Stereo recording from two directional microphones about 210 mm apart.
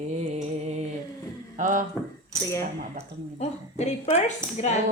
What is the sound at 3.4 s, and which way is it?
A woman's voice, 35° left (ahead or behind).